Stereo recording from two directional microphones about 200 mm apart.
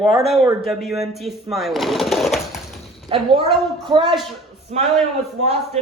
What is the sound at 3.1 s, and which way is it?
Speech, 30° right (ahead or behind).